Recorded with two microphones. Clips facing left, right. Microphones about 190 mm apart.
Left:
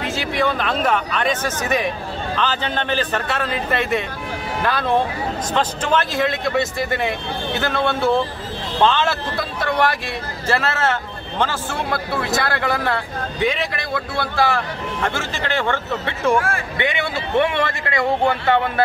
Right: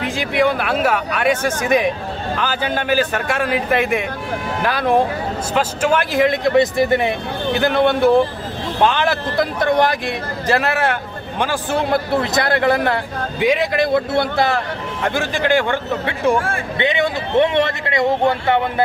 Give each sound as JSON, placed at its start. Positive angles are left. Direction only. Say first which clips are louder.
{"t": 0.1, "sound": "speech", "louder": "right 4 dB", "side_deg": -15}
{"t": 16.3, "sound": "speech", "louder": "even", "side_deg": -30}
{"t": 16.8, "sound": "speech", "louder": "right 5 dB", "side_deg": -20}